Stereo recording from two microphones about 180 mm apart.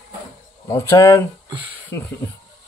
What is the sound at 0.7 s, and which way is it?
Speech, 15° left (ahead or behind).